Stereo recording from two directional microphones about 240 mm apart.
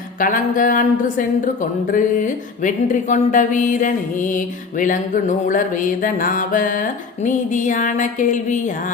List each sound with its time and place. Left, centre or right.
0.2 s music: left